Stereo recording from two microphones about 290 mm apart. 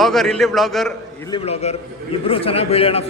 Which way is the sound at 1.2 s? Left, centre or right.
Centre.